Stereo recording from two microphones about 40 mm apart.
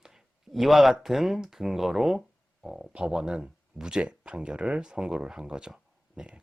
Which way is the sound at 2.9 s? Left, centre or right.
Right.